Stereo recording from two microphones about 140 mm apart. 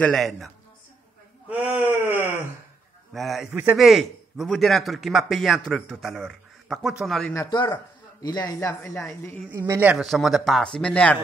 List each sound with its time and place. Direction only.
0.0 s speech: centre (ahead or behind)
1.5 s speech: 10° right (ahead or behind)
7.3 s speech: 30° left (ahead or behind)
9.5 s a man's voice: 20° right (ahead or behind)
9.9 s speech: centre (ahead or behind)